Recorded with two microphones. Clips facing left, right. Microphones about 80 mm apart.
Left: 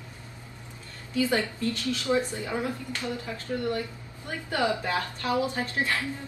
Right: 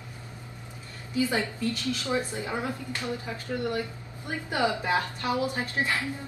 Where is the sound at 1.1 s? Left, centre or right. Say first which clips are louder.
Left 1 dB; right.